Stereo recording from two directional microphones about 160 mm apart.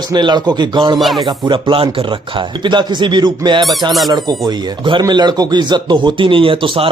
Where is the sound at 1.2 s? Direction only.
35° right (ahead or behind).